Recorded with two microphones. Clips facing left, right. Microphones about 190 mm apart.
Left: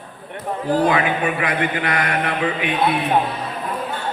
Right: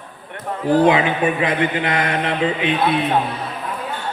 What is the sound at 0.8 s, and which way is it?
A man's voice, 25° right (ahead or behind).